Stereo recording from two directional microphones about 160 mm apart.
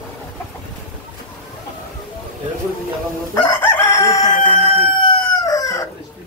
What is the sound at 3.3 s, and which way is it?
Crowing, 15° left (ahead or behind).